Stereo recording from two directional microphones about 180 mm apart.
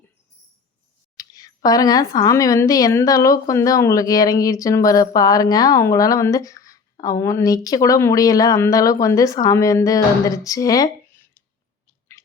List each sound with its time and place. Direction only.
1.1 s speech: 20° left (ahead or behind)